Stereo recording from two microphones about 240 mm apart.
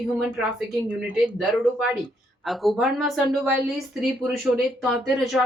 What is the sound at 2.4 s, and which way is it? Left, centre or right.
A woman's voice, centre.